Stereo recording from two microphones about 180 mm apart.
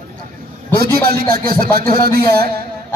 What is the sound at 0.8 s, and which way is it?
A man's voice, 55° right (ahead or behind).